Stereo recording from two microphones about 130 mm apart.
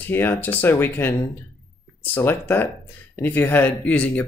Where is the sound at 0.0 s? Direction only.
15° left (ahead or behind).